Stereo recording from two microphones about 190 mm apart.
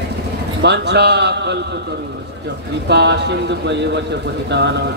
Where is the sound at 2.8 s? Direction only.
60° right (ahead or behind).